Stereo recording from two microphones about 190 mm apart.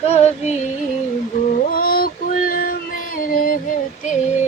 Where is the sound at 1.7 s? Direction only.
50° left (ahead or behind).